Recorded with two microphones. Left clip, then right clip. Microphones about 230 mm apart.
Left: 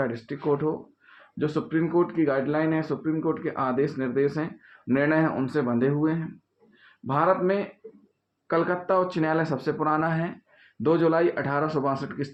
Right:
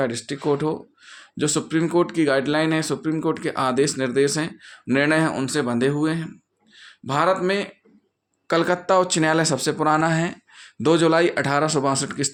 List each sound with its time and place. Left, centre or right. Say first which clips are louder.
0.0 s speech: right 4 dB; right
8.4 s speech: right 5 dB; right